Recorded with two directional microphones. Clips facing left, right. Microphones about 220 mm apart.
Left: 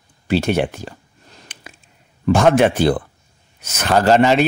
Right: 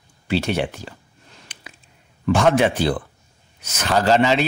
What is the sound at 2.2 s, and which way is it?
Speech, 45° left (ahead or behind).